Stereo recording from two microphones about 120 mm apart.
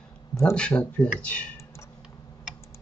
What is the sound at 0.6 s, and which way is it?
Speech, 10° left (ahead or behind).